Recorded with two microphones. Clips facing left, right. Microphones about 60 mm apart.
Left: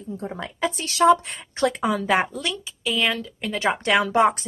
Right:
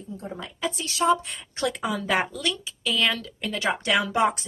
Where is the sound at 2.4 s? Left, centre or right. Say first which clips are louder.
Even; centre.